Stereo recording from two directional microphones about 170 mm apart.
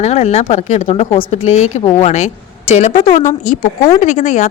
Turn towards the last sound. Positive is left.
turn(degrees=45)  # may be behind; listen again after turning